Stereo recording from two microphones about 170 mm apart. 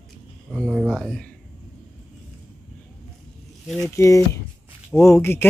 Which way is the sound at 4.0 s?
15° left (ahead or behind).